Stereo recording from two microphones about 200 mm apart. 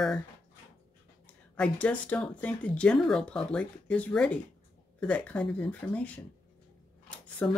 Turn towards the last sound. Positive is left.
turn(degrees=10)  # may be behind; listen again after turning